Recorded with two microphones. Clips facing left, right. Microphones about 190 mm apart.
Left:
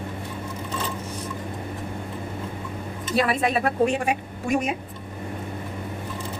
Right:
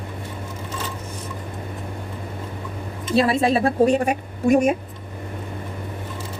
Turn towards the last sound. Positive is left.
turn(degrees=-45)  # may be behind; listen again after turning